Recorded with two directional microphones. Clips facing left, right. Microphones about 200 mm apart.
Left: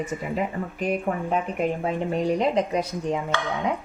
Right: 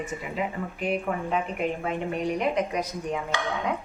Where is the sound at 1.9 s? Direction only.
30° left (ahead or behind).